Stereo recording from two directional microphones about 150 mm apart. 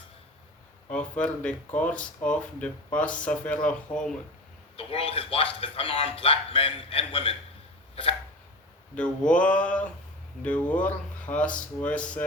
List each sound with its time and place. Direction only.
0.9 s speech: 10° left (ahead or behind)
4.8 s speech: 40° left (ahead or behind)
9.0 s speech: 10° left (ahead or behind)